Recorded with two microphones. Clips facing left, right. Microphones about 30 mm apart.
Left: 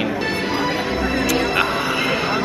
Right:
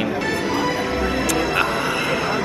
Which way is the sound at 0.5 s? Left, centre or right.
Left.